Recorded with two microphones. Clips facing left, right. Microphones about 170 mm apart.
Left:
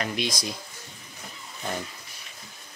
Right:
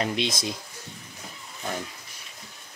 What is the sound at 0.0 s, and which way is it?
Speech, 25° right (ahead or behind).